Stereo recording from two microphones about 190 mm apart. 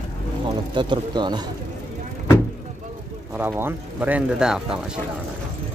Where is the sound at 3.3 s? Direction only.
10° right (ahead or behind).